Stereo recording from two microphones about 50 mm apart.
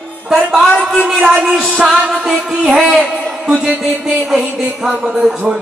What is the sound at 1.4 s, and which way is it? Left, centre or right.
Music, centre.